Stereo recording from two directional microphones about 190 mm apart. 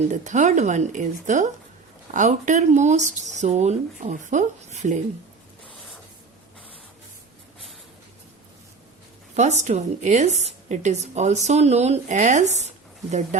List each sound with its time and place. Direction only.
0.0 s a woman's voice: 40° right (ahead or behind)
9.3 s a woman's voice: 35° right (ahead or behind)